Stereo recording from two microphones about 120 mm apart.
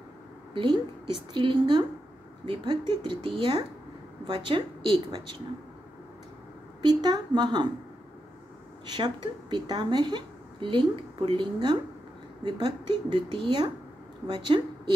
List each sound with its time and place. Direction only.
0.6 s speech: 40° right (ahead or behind)
6.8 s speech: 35° right (ahead or behind)
8.8 s a woman's voice: 40° right (ahead or behind)